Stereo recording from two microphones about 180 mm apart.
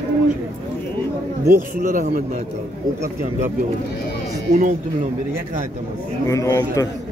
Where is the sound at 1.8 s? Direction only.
45° right (ahead or behind).